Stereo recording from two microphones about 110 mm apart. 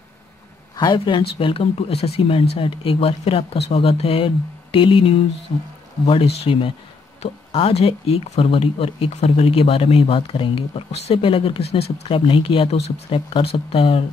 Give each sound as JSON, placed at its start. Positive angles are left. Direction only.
{"t": 0.7, "sound": "speech", "side_deg": 45}